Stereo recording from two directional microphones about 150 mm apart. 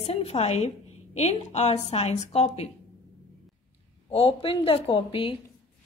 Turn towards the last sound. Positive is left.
turn(degrees=35)  # may be behind; listen again after turning